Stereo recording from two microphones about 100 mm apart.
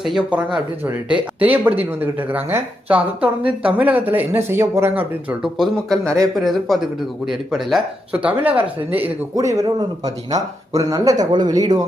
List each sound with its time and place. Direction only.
0.0 s speech: centre (ahead or behind)
0.3 s speech: 15° right (ahead or behind)
5.4 s speech: centre (ahead or behind)
8.2 s speech: 15° right (ahead or behind)
9.3 s speech: 35° right (ahead or behind)
11.3 s speech: 45° right (ahead or behind)